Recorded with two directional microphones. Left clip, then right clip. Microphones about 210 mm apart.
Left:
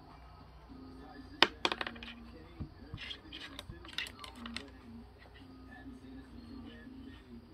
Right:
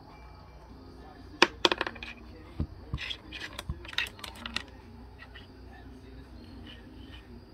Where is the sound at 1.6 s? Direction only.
55° right (ahead or behind).